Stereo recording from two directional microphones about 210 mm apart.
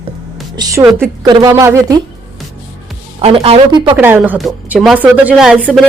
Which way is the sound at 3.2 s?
30° right (ahead or behind).